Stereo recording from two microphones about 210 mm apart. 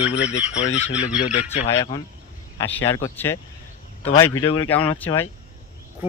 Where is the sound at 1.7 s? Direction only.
20° left (ahead or behind).